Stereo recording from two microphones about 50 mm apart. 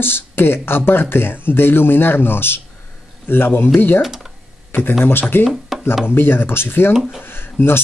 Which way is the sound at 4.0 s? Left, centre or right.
Centre.